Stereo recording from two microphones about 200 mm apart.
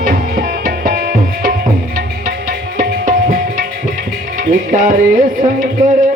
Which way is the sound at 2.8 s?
45° right (ahead or behind).